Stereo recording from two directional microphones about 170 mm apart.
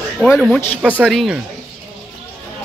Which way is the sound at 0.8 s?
5° right (ahead or behind).